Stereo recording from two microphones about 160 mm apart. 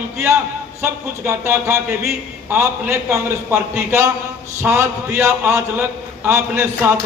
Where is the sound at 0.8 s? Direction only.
15° right (ahead or behind).